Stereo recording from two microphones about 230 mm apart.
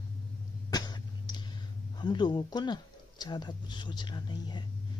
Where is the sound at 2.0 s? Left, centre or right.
Centre.